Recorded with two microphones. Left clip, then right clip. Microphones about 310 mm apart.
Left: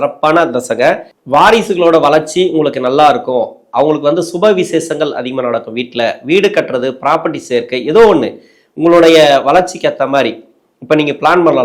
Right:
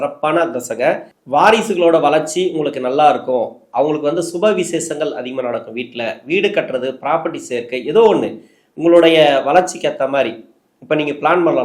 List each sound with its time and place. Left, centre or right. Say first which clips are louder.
0.0 s speech: left 6 dB; left